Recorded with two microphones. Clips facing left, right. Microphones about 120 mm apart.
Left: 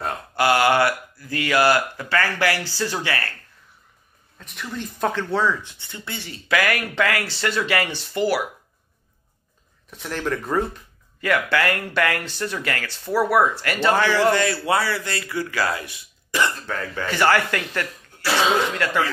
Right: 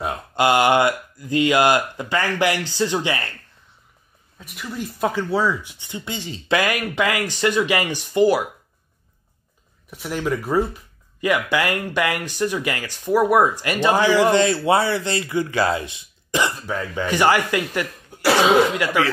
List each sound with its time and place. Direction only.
0.0 s speech: 20° right (ahead or behind)
4.4 s speech: 5° right (ahead or behind)
9.8 s speech: 10° right (ahead or behind)